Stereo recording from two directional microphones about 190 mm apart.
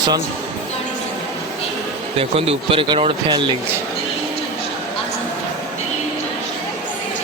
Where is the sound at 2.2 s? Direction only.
30° right (ahead or behind).